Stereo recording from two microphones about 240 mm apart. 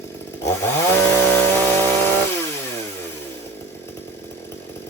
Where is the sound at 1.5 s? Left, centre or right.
Centre.